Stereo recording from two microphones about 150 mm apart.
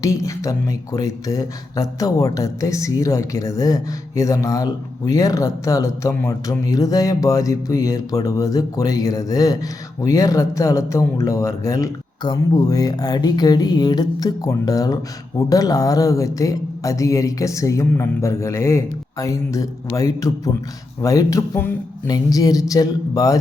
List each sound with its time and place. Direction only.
0.0 s speech: 20° left (ahead or behind)